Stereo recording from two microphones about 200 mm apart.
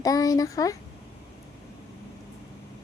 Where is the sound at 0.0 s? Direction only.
15° left (ahead or behind).